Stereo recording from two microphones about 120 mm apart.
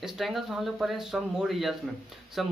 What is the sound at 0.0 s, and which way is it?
Speech, 5° right (ahead or behind).